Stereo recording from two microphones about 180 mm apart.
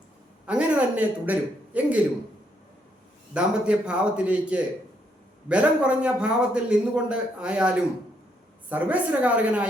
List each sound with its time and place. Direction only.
0.4 s a sound: 5° right (ahead or behind)
3.3 s a man's voice: 5° right (ahead or behind)
8.7 s speech: 10° right (ahead or behind)